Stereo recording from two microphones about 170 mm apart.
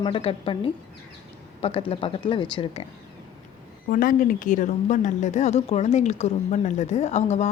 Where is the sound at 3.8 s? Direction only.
55° left (ahead or behind).